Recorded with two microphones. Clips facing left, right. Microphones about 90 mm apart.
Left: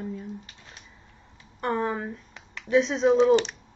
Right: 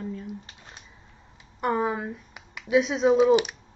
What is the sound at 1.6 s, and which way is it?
Speech, 10° right (ahead or behind).